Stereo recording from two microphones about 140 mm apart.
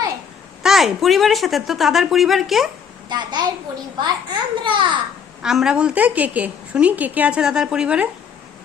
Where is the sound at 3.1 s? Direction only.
30° right (ahead or behind).